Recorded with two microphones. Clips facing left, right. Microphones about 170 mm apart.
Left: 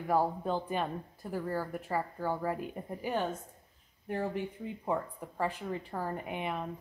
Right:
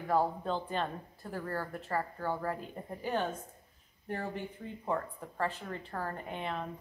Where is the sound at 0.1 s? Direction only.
10° left (ahead or behind).